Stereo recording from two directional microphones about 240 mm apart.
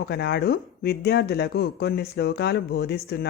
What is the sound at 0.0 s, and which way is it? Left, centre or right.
Speech, left.